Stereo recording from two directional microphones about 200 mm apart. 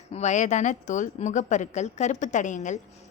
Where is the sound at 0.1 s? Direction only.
35° left (ahead or behind).